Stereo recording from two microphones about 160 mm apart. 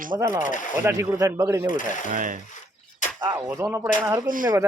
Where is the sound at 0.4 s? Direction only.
55° left (ahead or behind).